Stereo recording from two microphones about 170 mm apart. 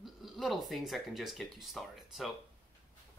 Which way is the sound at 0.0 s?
Centre (ahead or behind).